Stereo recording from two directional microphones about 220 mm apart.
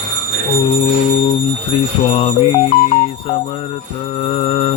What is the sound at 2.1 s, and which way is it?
Mantra, 25° left (ahead or behind).